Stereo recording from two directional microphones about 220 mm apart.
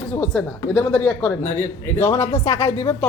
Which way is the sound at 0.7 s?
15° left (ahead or behind).